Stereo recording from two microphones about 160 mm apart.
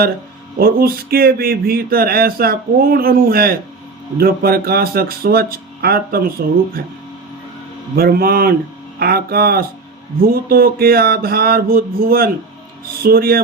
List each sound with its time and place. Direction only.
0.6 s speech: 70° right (ahead or behind)
7.9 s speech: 70° right (ahead or behind)